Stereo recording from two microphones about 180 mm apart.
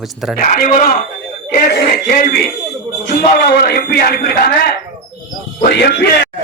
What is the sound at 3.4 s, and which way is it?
Speech, 60° left (ahead or behind).